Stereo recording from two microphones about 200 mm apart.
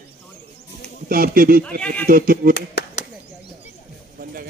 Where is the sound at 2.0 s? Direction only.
45° right (ahead or behind).